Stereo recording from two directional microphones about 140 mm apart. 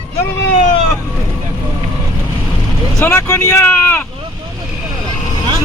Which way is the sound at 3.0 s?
15° left (ahead or behind).